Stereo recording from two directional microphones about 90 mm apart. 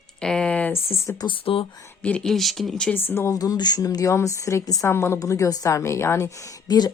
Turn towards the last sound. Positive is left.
turn(degrees=50)  # may be behind; listen again after turning